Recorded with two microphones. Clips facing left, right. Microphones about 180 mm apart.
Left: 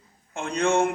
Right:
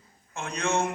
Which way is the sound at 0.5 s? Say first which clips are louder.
Left 6 dB; 55° left (ahead or behind).